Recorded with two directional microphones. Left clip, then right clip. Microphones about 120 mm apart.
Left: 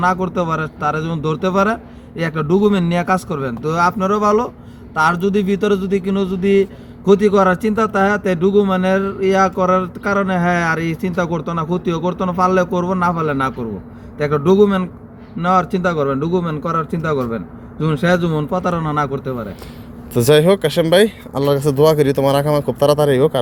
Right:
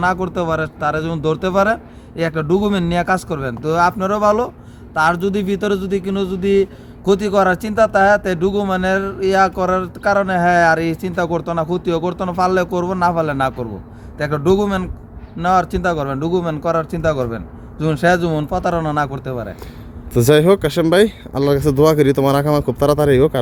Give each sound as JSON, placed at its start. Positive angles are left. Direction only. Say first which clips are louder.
{"t": 0.0, "sound": "a man's voice", "louder": "left 1 dB", "side_deg": -25}
{"t": 20.1, "sound": "speech", "louder": "even", "side_deg": -55}